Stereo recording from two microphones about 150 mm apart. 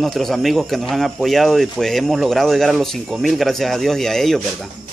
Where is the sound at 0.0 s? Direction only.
Centre (ahead or behind).